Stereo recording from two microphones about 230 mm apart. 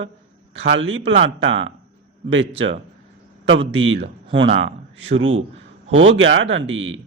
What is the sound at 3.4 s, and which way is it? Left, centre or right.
A man's voice, right.